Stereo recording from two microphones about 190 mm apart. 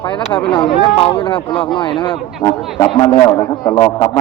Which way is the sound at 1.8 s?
25° left (ahead or behind).